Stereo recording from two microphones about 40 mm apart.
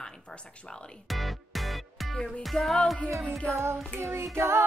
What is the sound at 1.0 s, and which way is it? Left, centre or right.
Music, centre.